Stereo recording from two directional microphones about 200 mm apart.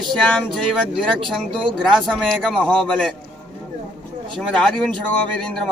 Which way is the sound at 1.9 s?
Centre (ahead or behind).